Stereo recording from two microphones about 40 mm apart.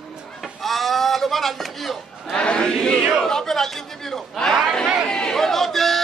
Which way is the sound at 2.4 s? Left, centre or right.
Left.